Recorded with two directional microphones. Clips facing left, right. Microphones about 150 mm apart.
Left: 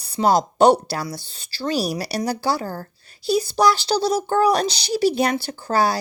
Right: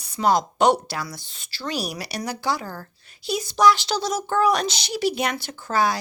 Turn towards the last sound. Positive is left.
turn(degrees=35)  # may be behind; listen again after turning